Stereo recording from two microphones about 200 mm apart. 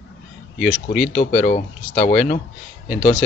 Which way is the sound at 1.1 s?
40° left (ahead or behind).